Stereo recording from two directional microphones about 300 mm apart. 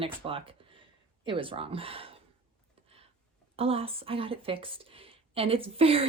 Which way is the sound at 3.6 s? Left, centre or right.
Centre.